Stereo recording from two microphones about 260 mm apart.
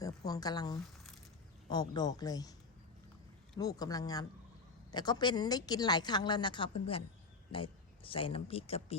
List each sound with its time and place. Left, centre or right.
0.3 s a woman's voice: centre
3.6 s a woman's voice: centre